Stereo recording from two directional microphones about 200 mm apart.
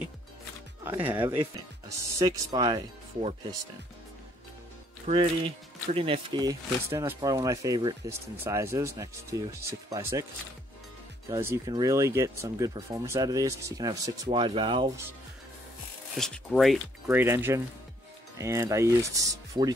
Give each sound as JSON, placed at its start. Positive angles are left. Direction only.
{"t": 1.1, "sound": "speech", "side_deg": -10}
{"t": 5.0, "sound": "speech", "side_deg": -30}
{"t": 11.5, "sound": "speech", "side_deg": -20}
{"t": 16.2, "sound": "speech", "side_deg": 0}
{"t": 17.2, "sound": "speech", "side_deg": -10}